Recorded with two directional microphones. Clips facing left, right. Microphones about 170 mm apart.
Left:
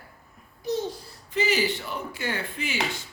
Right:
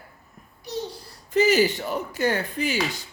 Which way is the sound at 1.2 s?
40° right (ahead or behind).